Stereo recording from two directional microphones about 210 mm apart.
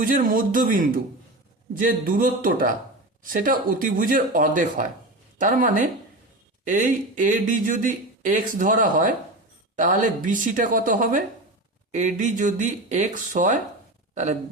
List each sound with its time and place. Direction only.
0.0 s speech: 40° right (ahead or behind)